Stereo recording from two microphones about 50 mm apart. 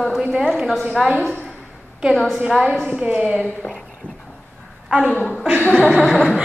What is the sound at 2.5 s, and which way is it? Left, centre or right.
Speech, centre.